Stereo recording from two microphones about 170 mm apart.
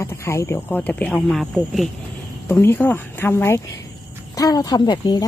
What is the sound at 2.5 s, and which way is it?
Speech, 10° left (ahead or behind).